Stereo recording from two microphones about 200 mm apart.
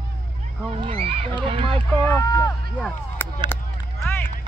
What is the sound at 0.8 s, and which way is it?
Speech, 30° right (ahead or behind).